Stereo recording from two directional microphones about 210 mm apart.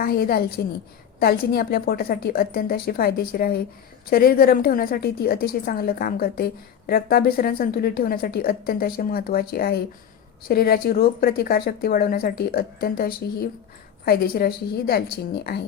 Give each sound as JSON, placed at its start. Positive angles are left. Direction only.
{"t": 0.0, "sound": "a woman's voice", "side_deg": 45}